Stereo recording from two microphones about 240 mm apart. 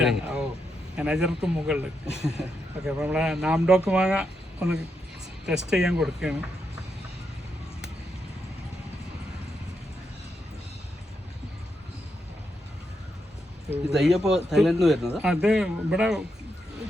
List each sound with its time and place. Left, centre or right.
0.0 s speech: centre
13.7 s speech: centre